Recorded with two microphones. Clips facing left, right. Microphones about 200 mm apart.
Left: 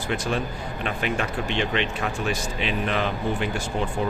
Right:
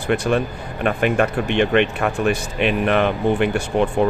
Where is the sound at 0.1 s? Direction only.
60° right (ahead or behind).